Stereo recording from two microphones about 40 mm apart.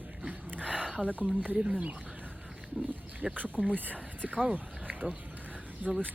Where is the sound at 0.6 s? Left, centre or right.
Centre.